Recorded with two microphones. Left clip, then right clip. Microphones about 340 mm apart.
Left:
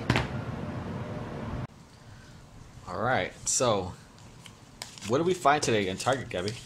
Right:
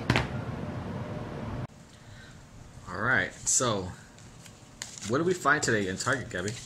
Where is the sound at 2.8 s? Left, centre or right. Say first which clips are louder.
Right 1 dB; centre.